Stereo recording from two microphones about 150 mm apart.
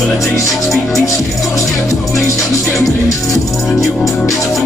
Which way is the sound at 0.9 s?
20° left (ahead or behind).